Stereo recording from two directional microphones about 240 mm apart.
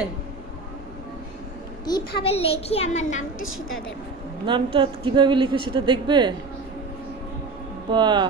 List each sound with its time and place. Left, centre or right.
1.9 s a child's voice: centre
4.5 s a woman's voice: right
7.9 s a woman's voice: centre